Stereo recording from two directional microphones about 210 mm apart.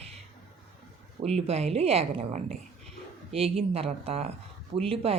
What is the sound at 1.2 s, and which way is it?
Speech, 30° right (ahead or behind).